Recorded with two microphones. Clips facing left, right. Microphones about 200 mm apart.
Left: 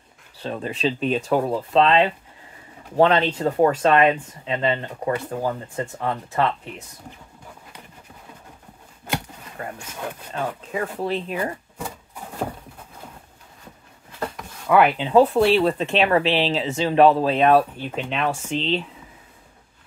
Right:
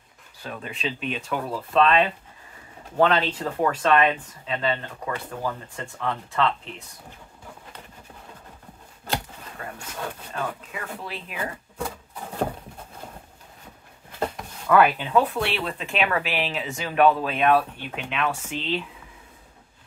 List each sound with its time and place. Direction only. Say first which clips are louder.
0.4 s speech: left 7 dB; 30° left (ahead or behind)
1.5 s speech: even; 25° left (ahead or behind)
9.6 s a sound: left 5 dB; 35° left (ahead or behind)
10.7 s speech: left 10 dB; 40° left (ahead or behind)
14.7 s speech: left 2 dB; 20° left (ahead or behind)